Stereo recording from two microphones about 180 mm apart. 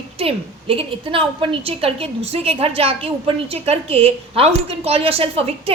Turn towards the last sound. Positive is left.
turn(degrees=-30)  # may be behind; listen again after turning